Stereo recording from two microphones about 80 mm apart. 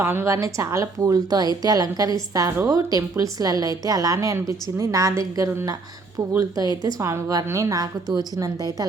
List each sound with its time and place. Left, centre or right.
0.0 s speech: right
6.4 s speech: right
7.0 s a woman's voice: right